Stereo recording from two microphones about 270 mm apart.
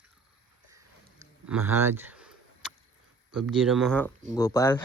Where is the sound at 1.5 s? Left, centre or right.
Centre.